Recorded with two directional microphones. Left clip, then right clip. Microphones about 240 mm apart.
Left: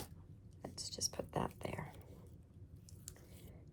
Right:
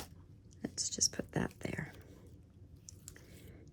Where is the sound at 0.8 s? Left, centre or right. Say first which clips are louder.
Right 8 dB; right.